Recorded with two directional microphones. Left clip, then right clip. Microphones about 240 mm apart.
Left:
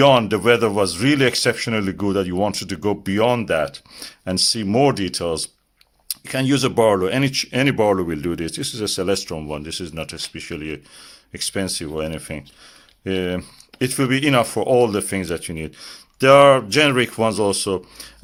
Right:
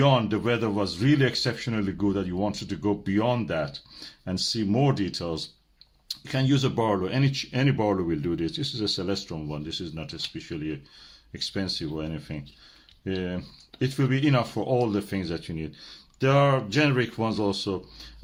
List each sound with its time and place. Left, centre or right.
0.0 s speech: left